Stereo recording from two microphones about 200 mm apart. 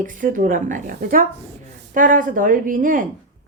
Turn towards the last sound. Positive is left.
turn(degrees=-40)  # may be behind; listen again after turning